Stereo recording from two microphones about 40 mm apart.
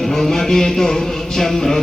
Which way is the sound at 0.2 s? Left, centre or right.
Centre.